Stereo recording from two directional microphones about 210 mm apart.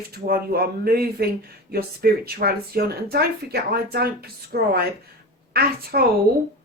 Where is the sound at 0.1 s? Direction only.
45° right (ahead or behind).